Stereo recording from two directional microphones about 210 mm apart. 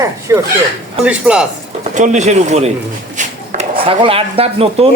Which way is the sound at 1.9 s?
35° right (ahead or behind).